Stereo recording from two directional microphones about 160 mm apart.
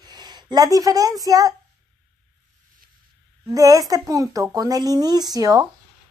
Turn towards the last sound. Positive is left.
turn(degrees=-20)  # may be behind; listen again after turning